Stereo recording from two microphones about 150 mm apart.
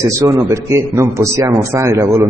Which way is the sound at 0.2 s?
20° right (ahead or behind).